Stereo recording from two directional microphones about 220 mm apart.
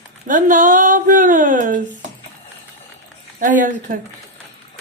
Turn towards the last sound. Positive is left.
turn(degrees=-35)  # may be behind; listen again after turning